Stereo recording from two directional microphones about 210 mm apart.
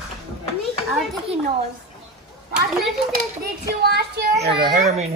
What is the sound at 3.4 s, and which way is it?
Speech, 50° right (ahead or behind).